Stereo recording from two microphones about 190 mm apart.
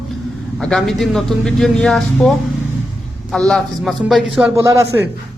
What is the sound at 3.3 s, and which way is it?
Speech, centre (ahead or behind).